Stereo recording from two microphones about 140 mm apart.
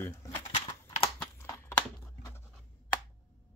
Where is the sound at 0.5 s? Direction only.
40° left (ahead or behind).